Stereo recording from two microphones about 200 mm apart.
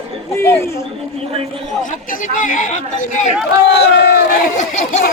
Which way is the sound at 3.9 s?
55° left (ahead or behind).